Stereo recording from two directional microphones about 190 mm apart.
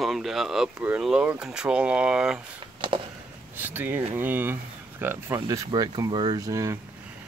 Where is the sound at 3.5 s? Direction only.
10° right (ahead or behind).